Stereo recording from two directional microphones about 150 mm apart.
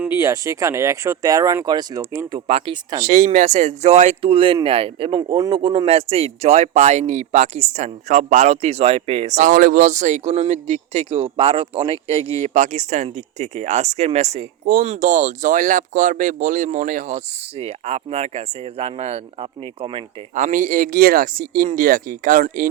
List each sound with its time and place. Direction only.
0.0 s speech: 20° right (ahead or behind)
2.5 s speech: 40° right (ahead or behind)
3.0 s a man's voice: 60° right (ahead or behind)
9.5 s speech: 80° right; by 20.0 s 35° right (ahead or behind)
20.3 s speech: 55° right (ahead or behind)